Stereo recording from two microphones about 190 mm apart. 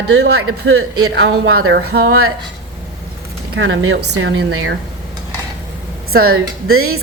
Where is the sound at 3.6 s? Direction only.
80° right.